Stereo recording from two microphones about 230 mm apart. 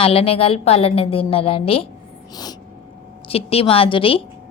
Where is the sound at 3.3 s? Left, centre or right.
Left.